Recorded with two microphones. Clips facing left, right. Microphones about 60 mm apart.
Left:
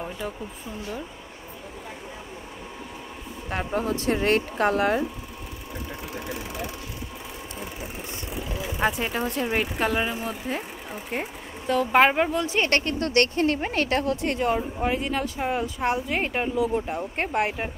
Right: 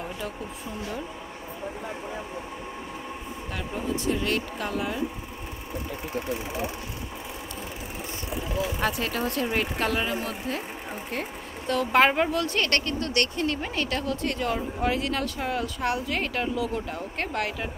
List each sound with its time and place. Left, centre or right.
3.4 s speech: left
9.0 s speech: centre
12.6 s speech: left
14.9 s speech: centre; by 17.6 s left